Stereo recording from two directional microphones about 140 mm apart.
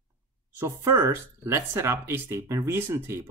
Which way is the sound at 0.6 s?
15° right (ahead or behind).